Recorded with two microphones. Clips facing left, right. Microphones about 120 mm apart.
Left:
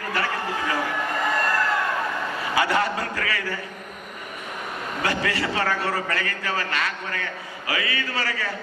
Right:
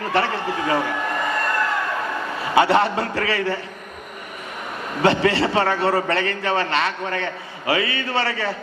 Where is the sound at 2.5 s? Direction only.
25° right (ahead or behind).